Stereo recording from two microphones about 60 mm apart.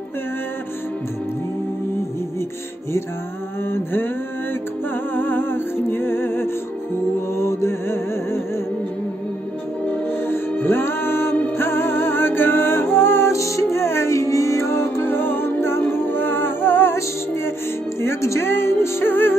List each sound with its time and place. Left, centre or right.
3.6 s mantra: left
5.1 s music: left
10.0 s music: left
13.4 s music: left
18.0 s music: left